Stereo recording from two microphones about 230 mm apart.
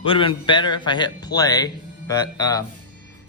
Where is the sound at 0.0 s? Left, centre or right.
Left.